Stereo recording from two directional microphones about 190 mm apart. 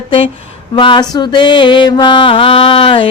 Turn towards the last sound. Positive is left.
turn(degrees=30)  # may be behind; listen again after turning